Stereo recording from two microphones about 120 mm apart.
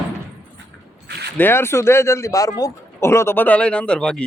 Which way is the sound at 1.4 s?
20° left (ahead or behind).